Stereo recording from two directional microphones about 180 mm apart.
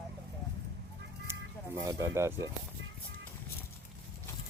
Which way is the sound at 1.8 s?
15° right (ahead or behind).